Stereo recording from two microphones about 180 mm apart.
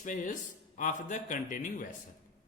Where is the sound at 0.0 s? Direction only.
45° left (ahead or behind).